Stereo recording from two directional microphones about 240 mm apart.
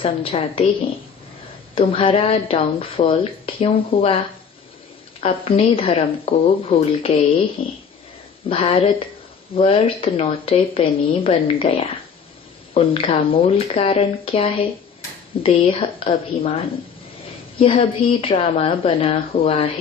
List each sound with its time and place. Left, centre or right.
0.0 s a woman's voice: left
1.7 s a woman's voice: left
5.2 s a woman's voice: left